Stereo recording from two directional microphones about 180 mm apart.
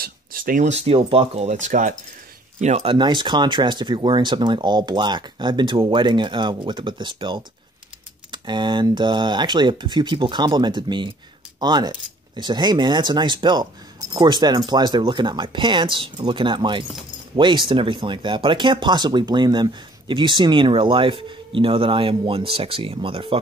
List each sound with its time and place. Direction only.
0.0 s speech: 50° right (ahead or behind)
2.6 s speech: 35° right (ahead or behind)